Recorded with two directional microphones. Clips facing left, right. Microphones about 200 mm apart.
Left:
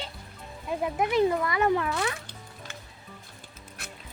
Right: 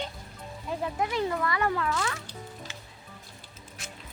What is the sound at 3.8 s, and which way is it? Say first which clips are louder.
Music: left 1 dB; 60° left (ahead or behind).